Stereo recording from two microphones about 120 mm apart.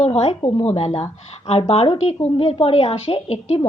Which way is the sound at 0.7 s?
60° left (ahead or behind).